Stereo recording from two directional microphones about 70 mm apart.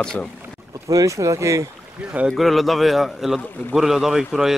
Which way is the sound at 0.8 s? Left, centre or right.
Right.